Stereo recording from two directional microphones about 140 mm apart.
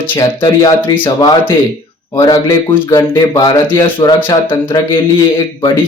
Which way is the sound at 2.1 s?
20° left (ahead or behind).